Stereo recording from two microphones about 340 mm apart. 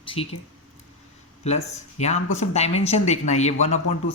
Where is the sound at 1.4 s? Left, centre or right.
Centre.